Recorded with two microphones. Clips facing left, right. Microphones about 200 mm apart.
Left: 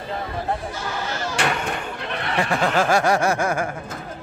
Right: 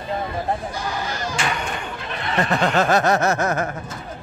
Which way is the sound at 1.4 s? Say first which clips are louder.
Left 4 dB; 65° left (ahead or behind).